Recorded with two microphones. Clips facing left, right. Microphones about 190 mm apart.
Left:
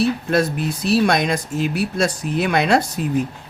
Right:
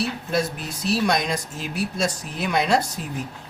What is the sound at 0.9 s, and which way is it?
Speech, 60° left (ahead or behind).